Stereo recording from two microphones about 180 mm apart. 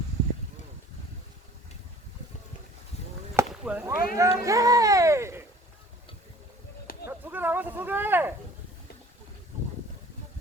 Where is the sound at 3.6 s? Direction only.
5° right (ahead or behind).